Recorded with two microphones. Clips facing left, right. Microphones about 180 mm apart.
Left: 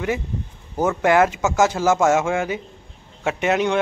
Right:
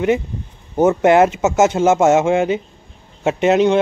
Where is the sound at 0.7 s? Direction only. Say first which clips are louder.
Right 5 dB; 25° right (ahead or behind).